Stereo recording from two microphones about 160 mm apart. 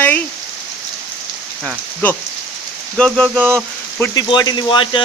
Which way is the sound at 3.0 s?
5° left (ahead or behind).